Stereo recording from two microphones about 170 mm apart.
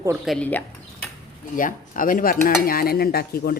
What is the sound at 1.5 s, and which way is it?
Speech, 55° left (ahead or behind).